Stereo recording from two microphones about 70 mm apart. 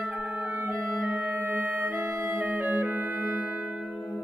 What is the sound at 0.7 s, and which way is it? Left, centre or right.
Clarinet, centre.